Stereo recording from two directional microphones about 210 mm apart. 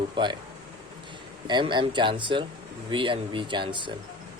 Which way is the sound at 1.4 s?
20° right (ahead or behind).